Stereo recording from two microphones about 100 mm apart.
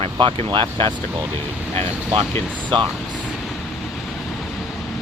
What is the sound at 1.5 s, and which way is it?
Vehicle, 10° right (ahead or behind).